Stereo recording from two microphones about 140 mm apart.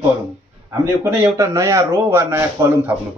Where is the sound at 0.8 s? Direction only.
20° right (ahead or behind).